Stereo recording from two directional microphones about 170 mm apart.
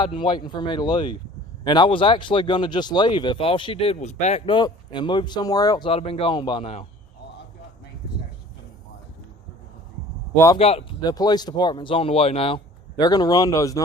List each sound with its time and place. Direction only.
0.0 s speech: 30° left (ahead or behind)
10.3 s speech: 15° left (ahead or behind)
10.6 s speech: 35° left (ahead or behind)
11.0 s speech: 25° left (ahead or behind)